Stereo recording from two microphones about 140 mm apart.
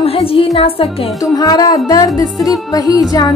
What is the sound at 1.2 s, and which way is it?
Speech, 30° left (ahead or behind).